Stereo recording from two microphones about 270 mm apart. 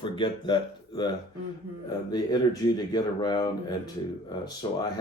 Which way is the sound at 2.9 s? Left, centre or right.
Centre.